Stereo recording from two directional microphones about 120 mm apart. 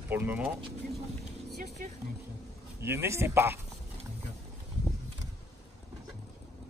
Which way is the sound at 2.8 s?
20° right (ahead or behind).